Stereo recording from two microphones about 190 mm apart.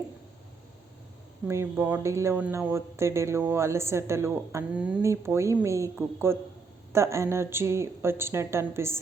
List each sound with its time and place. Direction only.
1.5 s speech: 10° right (ahead or behind)